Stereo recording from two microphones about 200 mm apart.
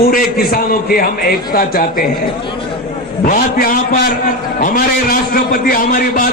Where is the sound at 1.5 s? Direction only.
45° left (ahead or behind).